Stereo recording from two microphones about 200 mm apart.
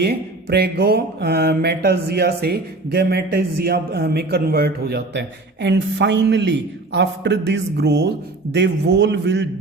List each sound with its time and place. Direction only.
0.0 s mantra: 55° right (ahead or behind)
8.5 s a man's voice: 60° right (ahead or behind)